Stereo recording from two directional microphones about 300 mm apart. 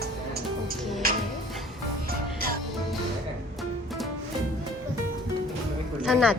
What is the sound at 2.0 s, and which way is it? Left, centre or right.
Music, right.